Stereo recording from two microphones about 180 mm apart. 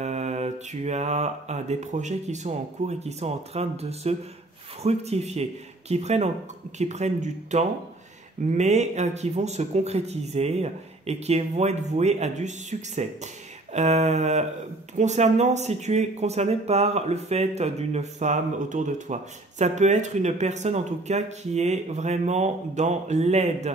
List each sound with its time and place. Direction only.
0.0 s speech: 40° right (ahead or behind)